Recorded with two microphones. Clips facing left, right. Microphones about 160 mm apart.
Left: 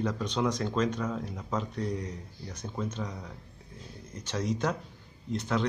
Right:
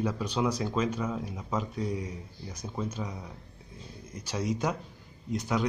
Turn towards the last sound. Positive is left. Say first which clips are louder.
# even
turn(degrees=-10)  # may be behind; listen again after turning